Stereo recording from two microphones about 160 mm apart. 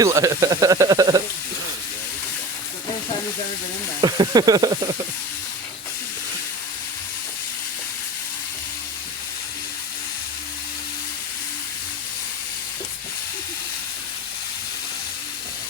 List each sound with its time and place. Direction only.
0.0 s speech: 20° right (ahead or behind)
4.0 s speech: 25° right (ahead or behind)